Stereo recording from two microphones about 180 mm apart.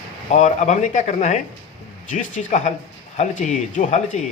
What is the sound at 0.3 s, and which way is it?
Speech, 40° left (ahead or behind).